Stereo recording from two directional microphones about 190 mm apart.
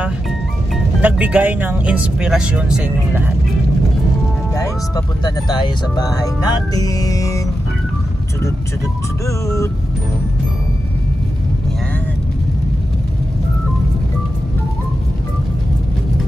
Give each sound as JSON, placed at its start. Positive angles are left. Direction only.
{"t": 1.0, "sound": "speech", "side_deg": -5}
{"t": 4.6, "sound": "speech", "side_deg": 20}
{"t": 9.2, "sound": "speech", "side_deg": 15}